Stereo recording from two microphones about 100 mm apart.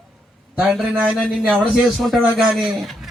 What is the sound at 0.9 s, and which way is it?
A man's voice, 10° right (ahead or behind).